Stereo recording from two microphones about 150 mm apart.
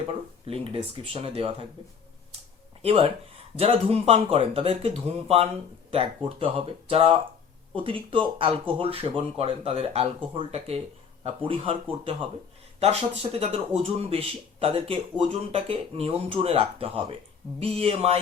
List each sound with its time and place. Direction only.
0.1 s speech: 40° right (ahead or behind)
2.8 s speech: 40° right (ahead or behind)
13.4 s speech: 45° right (ahead or behind)